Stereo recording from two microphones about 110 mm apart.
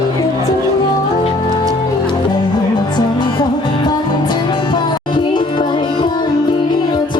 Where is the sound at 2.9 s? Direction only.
40° left (ahead or behind).